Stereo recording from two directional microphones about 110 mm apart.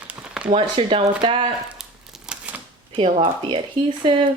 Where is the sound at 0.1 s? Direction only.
10° right (ahead or behind).